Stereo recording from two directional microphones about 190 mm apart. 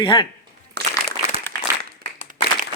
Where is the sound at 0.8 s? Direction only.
60° right (ahead or behind).